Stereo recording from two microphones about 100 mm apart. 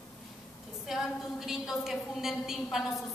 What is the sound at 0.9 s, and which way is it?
A woman's voice, 5° right (ahead or behind).